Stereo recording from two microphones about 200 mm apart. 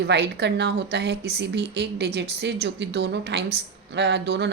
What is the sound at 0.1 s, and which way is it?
A woman's voice, 55° right (ahead or behind).